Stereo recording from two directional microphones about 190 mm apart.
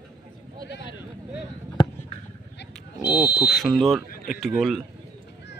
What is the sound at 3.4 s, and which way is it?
Speech, centre (ahead or behind).